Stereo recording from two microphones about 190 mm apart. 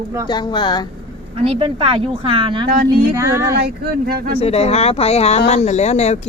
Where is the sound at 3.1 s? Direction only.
15° right (ahead or behind).